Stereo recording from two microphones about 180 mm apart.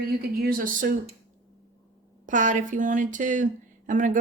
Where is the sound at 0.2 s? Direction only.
50° right (ahead or behind).